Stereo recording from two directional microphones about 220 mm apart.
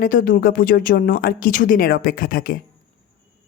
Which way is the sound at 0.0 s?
40° left (ahead or behind).